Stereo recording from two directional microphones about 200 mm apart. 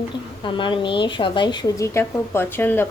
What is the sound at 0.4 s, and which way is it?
Speech, 25° left (ahead or behind).